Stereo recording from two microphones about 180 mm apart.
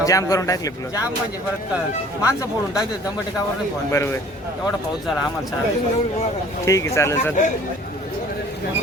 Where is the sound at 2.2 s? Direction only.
15° left (ahead or behind).